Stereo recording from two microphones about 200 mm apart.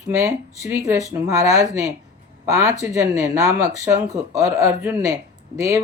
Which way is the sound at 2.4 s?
15° right (ahead or behind).